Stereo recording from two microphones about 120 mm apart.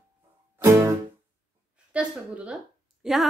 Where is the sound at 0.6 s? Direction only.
20° right (ahead or behind).